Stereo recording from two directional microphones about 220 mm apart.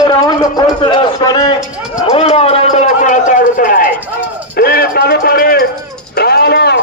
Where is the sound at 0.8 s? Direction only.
20° left (ahead or behind).